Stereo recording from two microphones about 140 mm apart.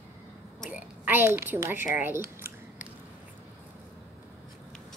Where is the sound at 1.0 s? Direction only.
15° right (ahead or behind).